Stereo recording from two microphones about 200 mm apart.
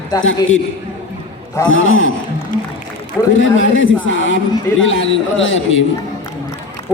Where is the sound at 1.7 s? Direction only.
80° left.